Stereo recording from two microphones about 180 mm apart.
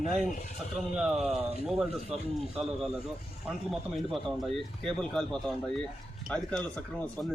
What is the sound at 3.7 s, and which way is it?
Speech, centre (ahead or behind).